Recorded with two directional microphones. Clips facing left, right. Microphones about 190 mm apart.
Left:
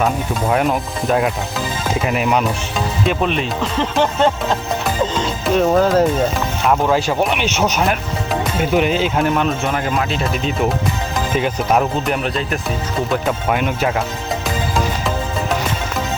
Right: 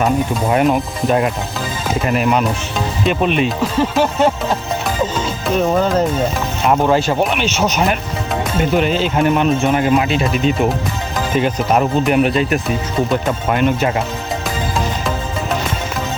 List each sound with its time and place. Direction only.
0.5 s speech: centre (ahead or behind)
5.2 s music: centre (ahead or behind)
6.7 s speech: centre (ahead or behind)
7.3 s speech: 15° left (ahead or behind)
7.6 s speech: centre (ahead or behind)
9.2 s speech: 5° right (ahead or behind)
13.1 s speech: centre (ahead or behind)